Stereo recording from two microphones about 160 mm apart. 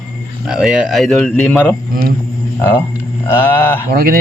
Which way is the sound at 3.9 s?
65° right (ahead or behind).